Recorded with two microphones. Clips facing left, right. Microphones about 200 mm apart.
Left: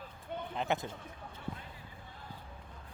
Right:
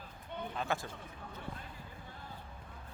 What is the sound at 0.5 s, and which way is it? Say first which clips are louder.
Speech: left 3 dB; 20° left (ahead or behind).